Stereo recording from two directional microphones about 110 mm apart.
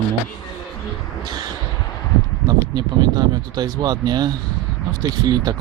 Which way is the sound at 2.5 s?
35° right (ahead or behind).